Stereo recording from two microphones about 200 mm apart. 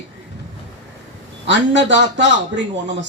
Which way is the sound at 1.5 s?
65° right (ahead or behind).